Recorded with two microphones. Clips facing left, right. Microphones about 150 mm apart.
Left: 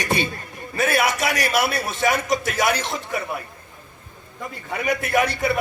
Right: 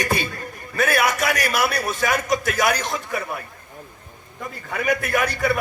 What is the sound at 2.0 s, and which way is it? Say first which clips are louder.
A man's voice: left 1 dB; 50° right (ahead or behind).